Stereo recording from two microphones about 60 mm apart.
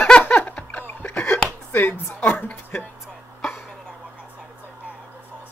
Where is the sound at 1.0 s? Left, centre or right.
Left.